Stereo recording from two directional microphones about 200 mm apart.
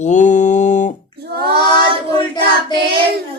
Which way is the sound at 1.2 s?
50° right (ahead or behind).